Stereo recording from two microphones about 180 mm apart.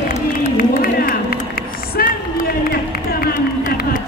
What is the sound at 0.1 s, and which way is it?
Run, 50° left (ahead or behind).